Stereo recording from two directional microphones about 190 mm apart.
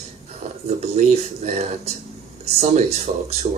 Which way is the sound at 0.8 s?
35° right (ahead or behind).